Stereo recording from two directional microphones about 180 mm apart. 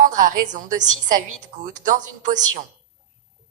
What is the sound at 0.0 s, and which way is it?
A woman's voice, 45° right (ahead or behind).